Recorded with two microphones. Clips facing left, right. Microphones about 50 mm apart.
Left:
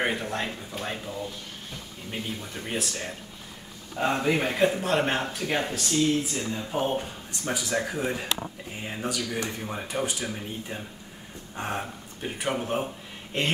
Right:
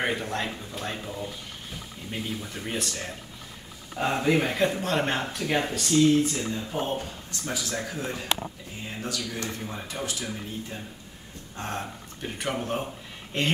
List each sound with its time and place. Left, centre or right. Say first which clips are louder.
0.0 s speech: even; centre
2.0 s speech: right 1 dB; centre
6.9 s a man's voice: left 1 dB; centre